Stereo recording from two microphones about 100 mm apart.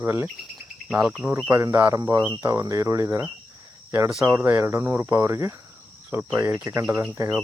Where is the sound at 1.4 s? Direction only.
25° right (ahead or behind).